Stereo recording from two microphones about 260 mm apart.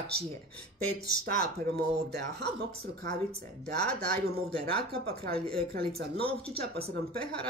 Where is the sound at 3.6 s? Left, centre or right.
Right.